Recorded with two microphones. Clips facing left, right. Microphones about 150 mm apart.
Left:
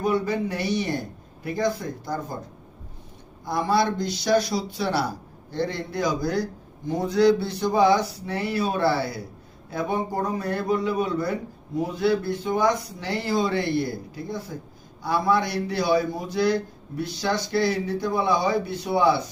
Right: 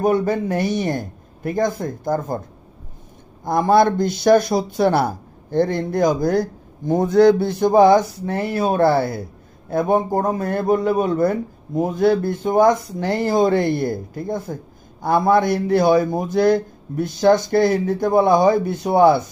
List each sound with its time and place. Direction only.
0.0 s a man's voice: 50° right (ahead or behind)
3.4 s a man's voice: 50° right (ahead or behind)